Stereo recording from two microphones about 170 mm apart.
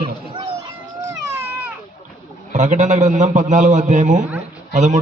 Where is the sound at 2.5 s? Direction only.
45° right (ahead or behind).